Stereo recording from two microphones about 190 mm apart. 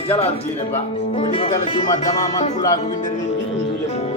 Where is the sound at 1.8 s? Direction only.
40° left (ahead or behind).